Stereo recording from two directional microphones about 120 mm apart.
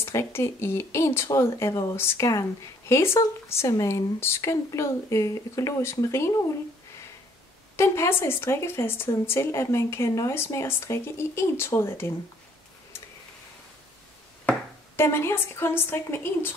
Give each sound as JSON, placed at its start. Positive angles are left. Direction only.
{"t": 0.0, "sound": "speech", "side_deg": 20}
{"t": 7.7, "sound": "speech", "side_deg": 25}
{"t": 15.0, "sound": "speech", "side_deg": 20}